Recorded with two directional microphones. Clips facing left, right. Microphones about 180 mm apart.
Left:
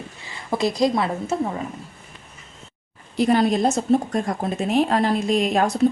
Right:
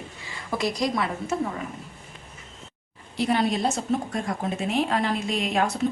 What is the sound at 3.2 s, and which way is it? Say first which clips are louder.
A woman's voice: left 5 dB; 45° left (ahead or behind).